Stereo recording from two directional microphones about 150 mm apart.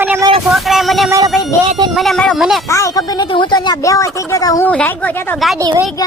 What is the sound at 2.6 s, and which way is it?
Speech, 20° left (ahead or behind).